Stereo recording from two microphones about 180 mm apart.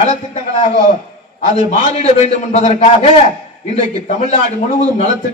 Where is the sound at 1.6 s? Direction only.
35° left (ahead or behind).